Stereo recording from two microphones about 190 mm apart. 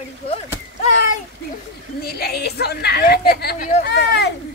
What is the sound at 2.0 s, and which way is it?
A woman's voice, 55° left (ahead or behind).